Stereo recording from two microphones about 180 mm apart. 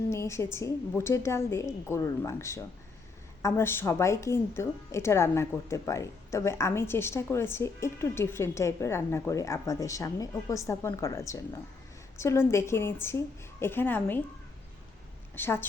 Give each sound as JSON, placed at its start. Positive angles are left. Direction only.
{"t": 0.1, "sound": "a woman's voice", "side_deg": 15}
{"t": 15.4, "sound": "a woman's voice", "side_deg": 10}